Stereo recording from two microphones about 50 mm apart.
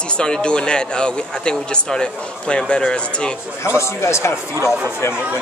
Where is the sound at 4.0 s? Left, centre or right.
Left.